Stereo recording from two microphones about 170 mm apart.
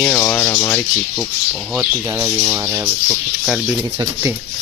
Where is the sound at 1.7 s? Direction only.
15° right (ahead or behind).